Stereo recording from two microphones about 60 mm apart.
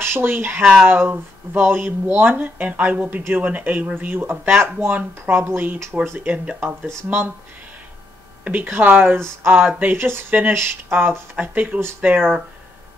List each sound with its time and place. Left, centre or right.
0.0 s speech: right
8.5 s speech: right